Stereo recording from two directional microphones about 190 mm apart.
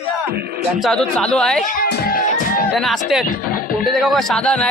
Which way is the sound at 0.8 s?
5° left (ahead or behind).